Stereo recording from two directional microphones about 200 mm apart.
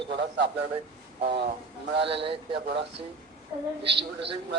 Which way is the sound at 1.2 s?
55° right (ahead or behind).